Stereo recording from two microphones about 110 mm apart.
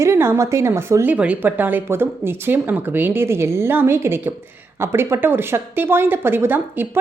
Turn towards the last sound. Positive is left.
turn(degrees=-20)  # may be behind; listen again after turning